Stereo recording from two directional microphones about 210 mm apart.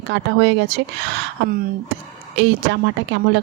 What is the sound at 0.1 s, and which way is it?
Speech, 55° right (ahead or behind).